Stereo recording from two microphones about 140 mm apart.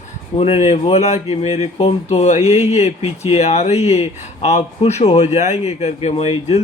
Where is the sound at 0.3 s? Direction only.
45° left (ahead or behind).